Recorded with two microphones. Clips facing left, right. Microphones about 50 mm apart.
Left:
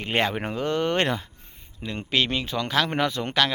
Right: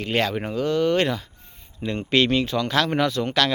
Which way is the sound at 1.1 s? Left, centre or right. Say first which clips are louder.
Even; left.